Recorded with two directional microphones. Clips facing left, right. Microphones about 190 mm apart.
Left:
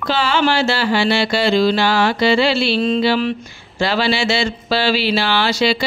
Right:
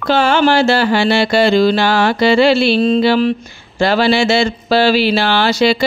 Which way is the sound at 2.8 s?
45° right (ahead or behind).